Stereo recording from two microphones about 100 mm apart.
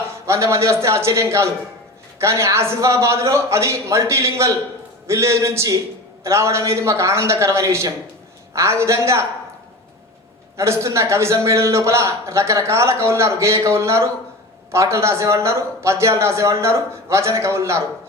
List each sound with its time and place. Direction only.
0.3 s a man's voice: 30° right (ahead or behind)
10.6 s a man's voice: 30° right (ahead or behind)